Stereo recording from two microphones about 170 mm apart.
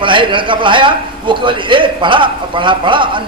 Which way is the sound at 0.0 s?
30° right (ahead or behind).